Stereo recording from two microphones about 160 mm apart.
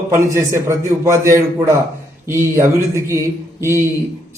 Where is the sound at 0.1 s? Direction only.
15° right (ahead or behind).